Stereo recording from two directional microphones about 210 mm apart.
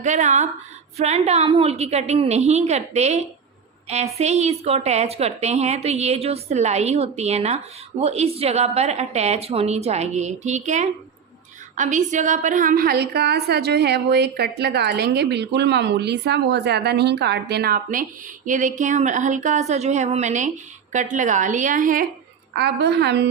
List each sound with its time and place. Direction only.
0.0 s a woman's voice: 35° right (ahead or behind)
22.5 s a woman's voice: 50° right (ahead or behind)